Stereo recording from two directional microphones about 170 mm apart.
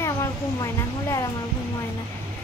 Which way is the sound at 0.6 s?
15° left (ahead or behind).